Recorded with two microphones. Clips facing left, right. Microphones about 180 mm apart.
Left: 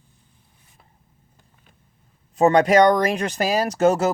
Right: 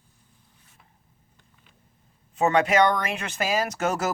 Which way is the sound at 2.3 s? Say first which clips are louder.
Left 6 dB; 35° left (ahead or behind).